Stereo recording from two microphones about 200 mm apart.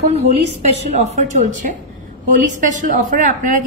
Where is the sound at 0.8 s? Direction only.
35° right (ahead or behind).